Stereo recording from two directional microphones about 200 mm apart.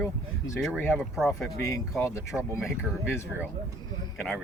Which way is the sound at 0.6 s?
Centre (ahead or behind).